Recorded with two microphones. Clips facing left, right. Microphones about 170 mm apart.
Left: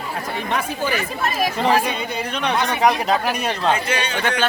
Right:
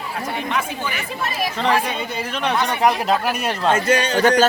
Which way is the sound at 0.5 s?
40° left (ahead or behind).